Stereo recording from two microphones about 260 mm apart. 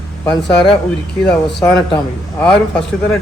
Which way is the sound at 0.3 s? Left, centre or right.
Centre.